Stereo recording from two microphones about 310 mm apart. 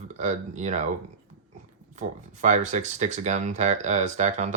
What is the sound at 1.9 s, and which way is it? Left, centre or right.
Speech, right.